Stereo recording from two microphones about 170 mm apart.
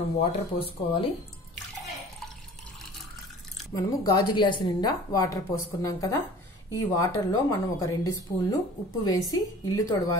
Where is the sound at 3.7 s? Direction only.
20° left (ahead or behind).